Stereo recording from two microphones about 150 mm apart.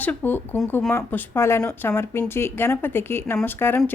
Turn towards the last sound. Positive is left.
turn(degrees=15)  # may be behind; listen again after turning